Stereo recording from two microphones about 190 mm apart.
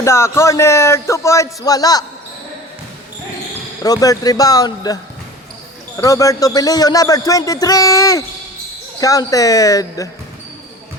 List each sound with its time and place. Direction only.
0.0 s speech: 15° left (ahead or behind)
3.8 s speech: 20° left (ahead or behind)
6.0 s speech: 15° left (ahead or behind)